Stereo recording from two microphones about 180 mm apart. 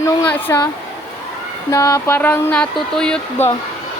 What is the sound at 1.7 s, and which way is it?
Speech, 15° left (ahead or behind).